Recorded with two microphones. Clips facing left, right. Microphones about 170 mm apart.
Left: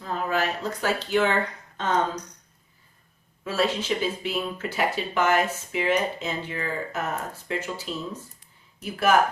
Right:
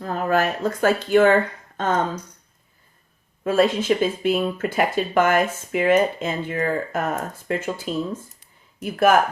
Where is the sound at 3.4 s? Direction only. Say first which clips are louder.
Right 7 dB; 50° right (ahead or behind).